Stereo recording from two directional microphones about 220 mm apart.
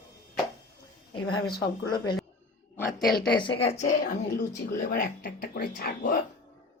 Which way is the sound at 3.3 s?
25° left (ahead or behind).